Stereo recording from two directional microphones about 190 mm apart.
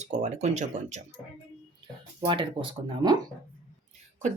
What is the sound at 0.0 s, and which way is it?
Speech, 40° right (ahead or behind).